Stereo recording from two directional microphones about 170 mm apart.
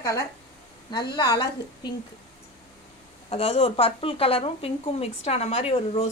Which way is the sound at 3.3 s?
35° left (ahead or behind).